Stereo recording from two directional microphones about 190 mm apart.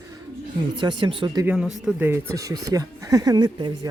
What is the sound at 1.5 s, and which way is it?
Speech, 5° right (ahead or behind).